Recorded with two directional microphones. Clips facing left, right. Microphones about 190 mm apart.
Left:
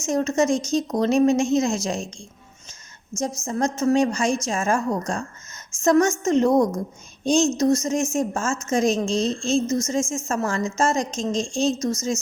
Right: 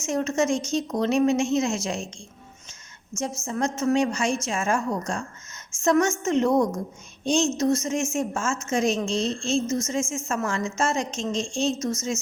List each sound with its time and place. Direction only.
0.0 s a woman's voice: 40° left (ahead or behind)
3.4 s a woman's voice: 40° left (ahead or behind)